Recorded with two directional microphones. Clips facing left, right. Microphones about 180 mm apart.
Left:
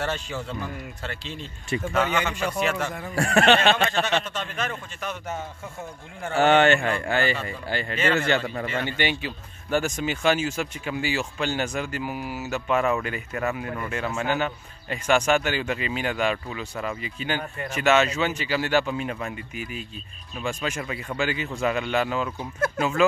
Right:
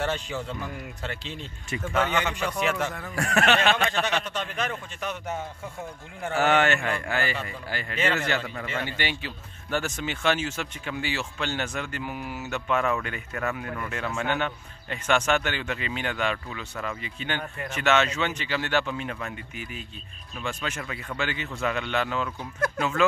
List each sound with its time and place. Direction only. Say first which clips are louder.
0.0 s a man's voice: even; 15° right (ahead or behind)
2.0 s speech: left 1 dB; 10° left (ahead or behind)
3.2 s a man's voice: left 4 dB; 30° left (ahead or behind)
4.3 s a man's voice: even; 15° right (ahead or behind)
6.3 s a man's voice: left 4 dB; 30° left (ahead or behind)
19.5 s speech: left 4 dB; 10° left (ahead or behind)